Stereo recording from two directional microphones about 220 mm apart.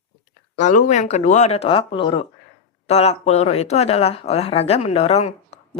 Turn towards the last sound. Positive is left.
turn(degrees=30)  # may be behind; listen again after turning